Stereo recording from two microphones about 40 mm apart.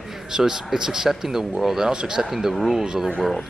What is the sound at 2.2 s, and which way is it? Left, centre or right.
Speech, centre.